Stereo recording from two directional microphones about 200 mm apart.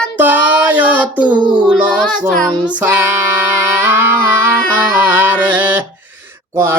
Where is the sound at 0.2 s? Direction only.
10° right (ahead or behind).